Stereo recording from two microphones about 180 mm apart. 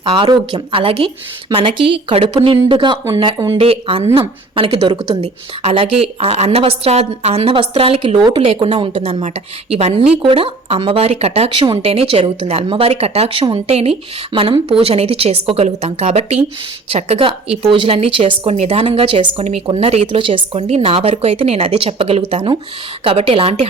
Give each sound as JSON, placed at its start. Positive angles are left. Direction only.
{"t": 0.0, "sound": "speech", "side_deg": -30}
{"t": 9.7, "sound": "speech", "side_deg": -40}